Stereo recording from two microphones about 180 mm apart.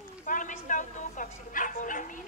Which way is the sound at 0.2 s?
45° left (ahead or behind).